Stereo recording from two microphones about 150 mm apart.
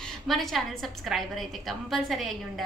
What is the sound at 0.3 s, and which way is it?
A woman's voice, centre (ahead or behind).